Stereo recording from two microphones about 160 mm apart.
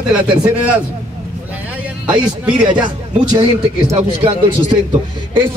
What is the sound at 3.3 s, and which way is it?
Speech, 40° right (ahead or behind).